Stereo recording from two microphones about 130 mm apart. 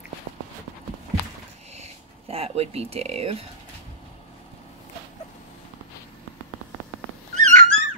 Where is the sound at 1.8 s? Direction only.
50° right (ahead or behind).